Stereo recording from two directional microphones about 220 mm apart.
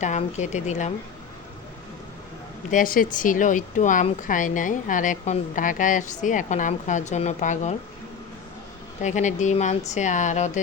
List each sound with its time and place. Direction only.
0.0 s a woman's voice: 30° left (ahead or behind)
2.6 s a woman's voice: 35° left (ahead or behind)
9.0 s a woman's voice: 35° left (ahead or behind)